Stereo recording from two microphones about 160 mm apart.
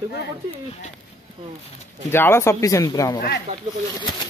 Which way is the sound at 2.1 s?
15° left (ahead or behind).